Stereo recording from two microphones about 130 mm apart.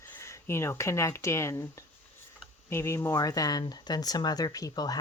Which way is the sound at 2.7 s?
20° left (ahead or behind).